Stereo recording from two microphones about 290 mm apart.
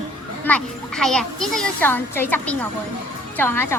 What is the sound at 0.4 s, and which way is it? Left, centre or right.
A child's voice, centre.